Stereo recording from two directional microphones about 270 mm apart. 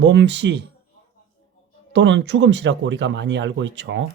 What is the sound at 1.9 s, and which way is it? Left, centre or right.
Speech, right.